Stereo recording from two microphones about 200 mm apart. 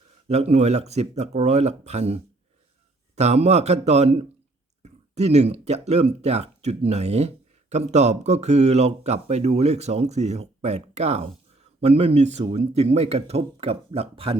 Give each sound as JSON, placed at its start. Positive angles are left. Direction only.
{"t": 0.3, "sound": "speech", "side_deg": -30}